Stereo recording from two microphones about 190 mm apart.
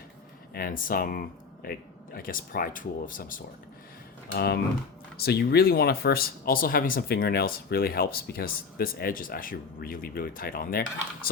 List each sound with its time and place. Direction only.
0.5 s speech: 50° left (ahead or behind)
4.4 s speech: 55° left (ahead or behind)